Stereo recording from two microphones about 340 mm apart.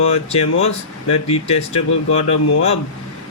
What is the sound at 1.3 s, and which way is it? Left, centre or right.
Speech, centre.